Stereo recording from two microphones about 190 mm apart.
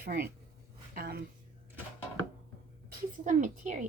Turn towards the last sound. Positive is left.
turn(degrees=-40)  # may be behind; listen again after turning